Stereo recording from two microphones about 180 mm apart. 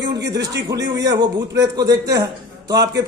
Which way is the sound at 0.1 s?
20° right (ahead or behind).